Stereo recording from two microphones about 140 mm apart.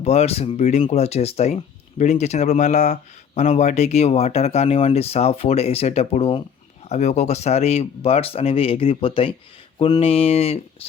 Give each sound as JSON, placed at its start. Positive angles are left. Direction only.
{"t": 0.0, "sound": "speech", "side_deg": 50}